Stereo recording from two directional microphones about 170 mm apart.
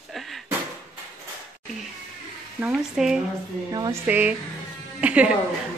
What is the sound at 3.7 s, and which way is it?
Speech, 25° right (ahead or behind).